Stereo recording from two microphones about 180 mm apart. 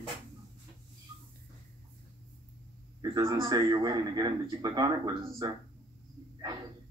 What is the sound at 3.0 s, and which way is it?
A man's voice, 20° right (ahead or behind).